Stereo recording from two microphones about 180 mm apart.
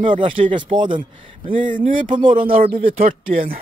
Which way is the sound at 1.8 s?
45° right (ahead or behind).